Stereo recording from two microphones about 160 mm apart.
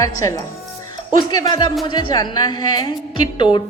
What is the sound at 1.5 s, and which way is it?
A woman's voice, 25° left (ahead or behind).